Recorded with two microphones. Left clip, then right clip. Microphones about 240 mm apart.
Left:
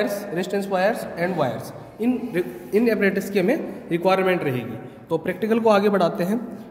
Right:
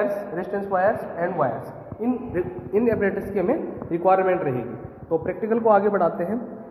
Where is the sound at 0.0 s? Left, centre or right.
Left.